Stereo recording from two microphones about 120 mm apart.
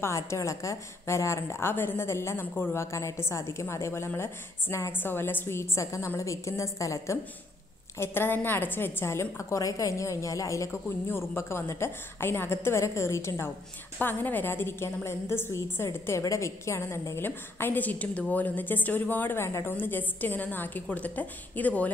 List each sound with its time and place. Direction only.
0.0 s a woman's voice: 25° left (ahead or behind)